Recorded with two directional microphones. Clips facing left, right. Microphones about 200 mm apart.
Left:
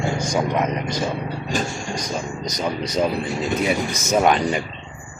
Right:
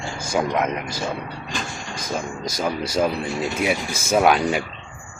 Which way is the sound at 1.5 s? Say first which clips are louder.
Left 9 dB; 45° left (ahead or behind).